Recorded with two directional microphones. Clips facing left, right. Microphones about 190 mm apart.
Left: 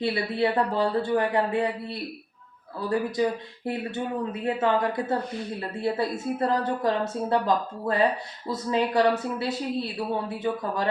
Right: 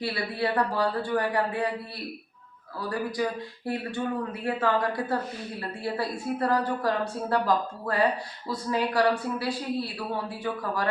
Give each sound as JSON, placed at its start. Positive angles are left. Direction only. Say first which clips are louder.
{"t": 0.0, "sound": "speech", "louder": "left 4 dB", "side_deg": 25}
{"t": 3.2, "sound": "speech", "louder": "left 4 dB", "side_deg": 25}